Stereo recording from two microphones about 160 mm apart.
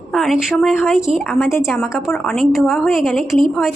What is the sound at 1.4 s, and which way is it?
Speech, 15° left (ahead or behind).